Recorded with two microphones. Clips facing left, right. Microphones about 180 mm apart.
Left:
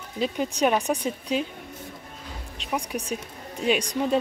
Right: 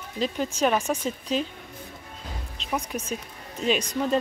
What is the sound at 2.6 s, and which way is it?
Speech, 10° left (ahead or behind).